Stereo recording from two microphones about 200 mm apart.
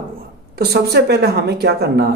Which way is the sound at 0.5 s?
55° right (ahead or behind).